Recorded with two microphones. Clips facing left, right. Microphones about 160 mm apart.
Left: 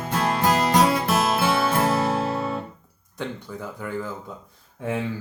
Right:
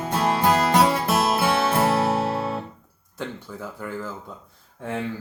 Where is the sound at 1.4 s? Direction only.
25° right (ahead or behind).